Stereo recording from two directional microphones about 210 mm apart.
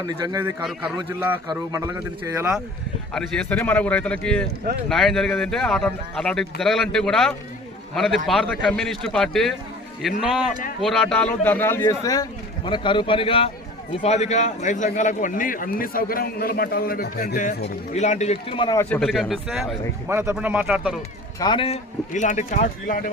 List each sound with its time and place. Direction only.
0.0 s a man's voice: 15° right (ahead or behind)
0.6 s speech: centre (ahead or behind)
0.9 s a man's voice: 15° right (ahead or behind)
3.1 s a man's voice: 5° left (ahead or behind); by 18.9 s 20° left (ahead or behind)
18.9 s speech: centre (ahead or behind)
20.1 s a man's voice: 10° right (ahead or behind)
21.3 s a man's voice: 20° left (ahead or behind); by 23.0 s 40° left (ahead or behind)